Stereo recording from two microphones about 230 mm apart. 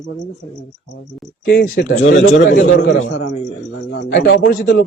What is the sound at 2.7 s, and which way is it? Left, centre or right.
Speech, left.